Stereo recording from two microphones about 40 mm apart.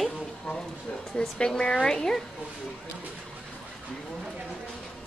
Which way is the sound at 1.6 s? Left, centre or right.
Left.